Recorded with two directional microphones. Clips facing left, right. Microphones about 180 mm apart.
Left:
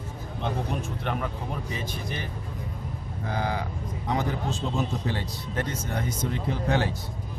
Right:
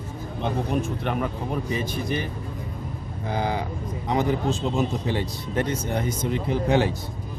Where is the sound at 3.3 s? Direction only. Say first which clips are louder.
Right 3 dB; 20° right (ahead or behind).